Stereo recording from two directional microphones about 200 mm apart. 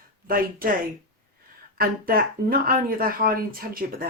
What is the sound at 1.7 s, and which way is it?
Speech, 45° right (ahead or behind).